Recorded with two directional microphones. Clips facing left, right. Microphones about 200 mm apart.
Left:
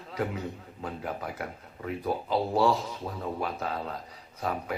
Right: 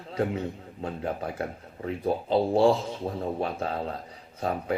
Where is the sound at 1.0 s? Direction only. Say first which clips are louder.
Right 5 dB; 30° right (ahead or behind).